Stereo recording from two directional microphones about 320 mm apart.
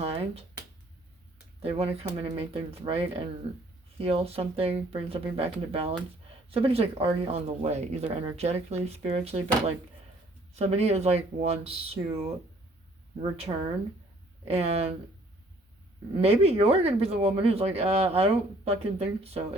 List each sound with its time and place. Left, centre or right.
0.0 s finger snapping: centre
1.6 s speech: centre
10.5 s speech: centre
13.5 s speech: centre
16.2 s speech: centre